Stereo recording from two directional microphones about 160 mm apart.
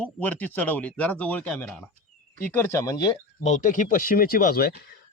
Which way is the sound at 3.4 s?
50° left (ahead or behind).